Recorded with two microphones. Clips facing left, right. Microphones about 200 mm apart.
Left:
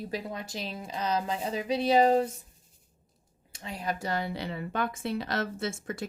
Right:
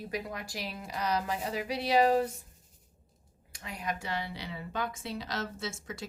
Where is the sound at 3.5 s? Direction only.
30° left (ahead or behind); by 6.1 s 55° left (ahead or behind).